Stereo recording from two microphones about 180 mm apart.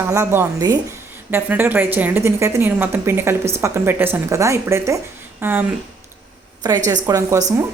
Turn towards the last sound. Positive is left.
turn(degrees=-15)  # may be behind; listen again after turning